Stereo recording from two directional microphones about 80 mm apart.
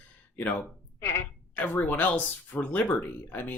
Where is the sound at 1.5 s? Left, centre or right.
Left.